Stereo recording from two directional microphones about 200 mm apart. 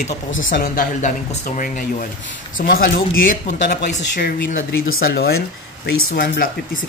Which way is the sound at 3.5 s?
40° left (ahead or behind).